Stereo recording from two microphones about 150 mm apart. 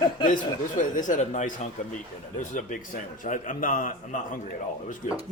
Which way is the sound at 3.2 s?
60° left (ahead or behind).